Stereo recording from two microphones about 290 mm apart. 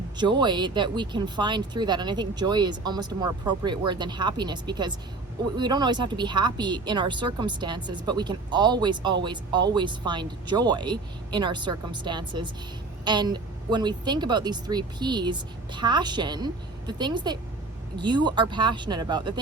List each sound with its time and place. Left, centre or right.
0.2 s speech: centre